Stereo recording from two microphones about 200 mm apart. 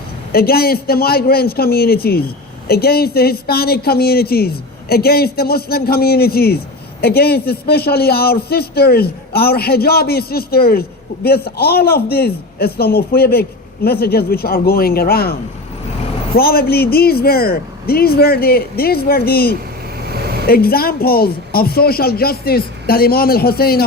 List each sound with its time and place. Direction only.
0.3 s a man's voice: 50° left (ahead or behind)